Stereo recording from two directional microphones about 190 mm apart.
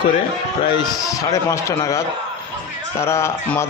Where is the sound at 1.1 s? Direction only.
15° left (ahead or behind).